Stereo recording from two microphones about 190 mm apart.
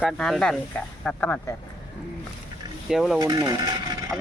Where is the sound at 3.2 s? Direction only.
20° right (ahead or behind).